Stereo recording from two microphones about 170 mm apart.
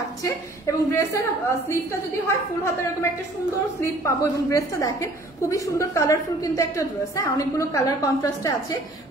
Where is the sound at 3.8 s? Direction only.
20° left (ahead or behind).